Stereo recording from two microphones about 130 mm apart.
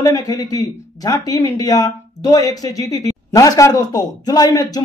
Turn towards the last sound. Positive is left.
turn(degrees=30)  # may be behind; listen again after turning